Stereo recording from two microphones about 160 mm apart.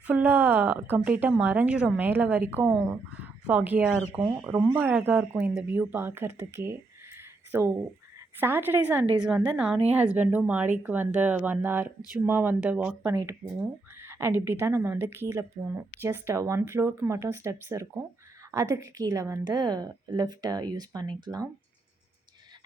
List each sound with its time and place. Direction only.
0.1 s a woman's voice: 10° right (ahead or behind)